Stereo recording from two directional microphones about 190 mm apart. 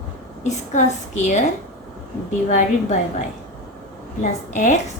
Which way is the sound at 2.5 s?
40° left (ahead or behind).